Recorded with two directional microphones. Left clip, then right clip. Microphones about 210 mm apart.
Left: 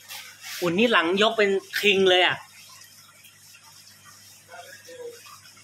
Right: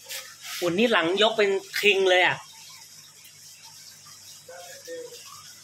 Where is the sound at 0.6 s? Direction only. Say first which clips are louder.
Left 1 dB; 10° left (ahead or behind).